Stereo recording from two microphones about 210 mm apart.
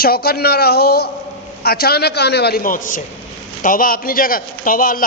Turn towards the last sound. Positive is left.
turn(degrees=40)  # may be behind; listen again after turning